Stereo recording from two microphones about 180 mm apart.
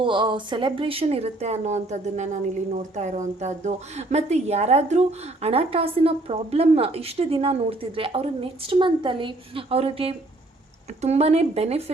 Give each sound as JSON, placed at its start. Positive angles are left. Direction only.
{"t": 0.0, "sound": "speech", "side_deg": -25}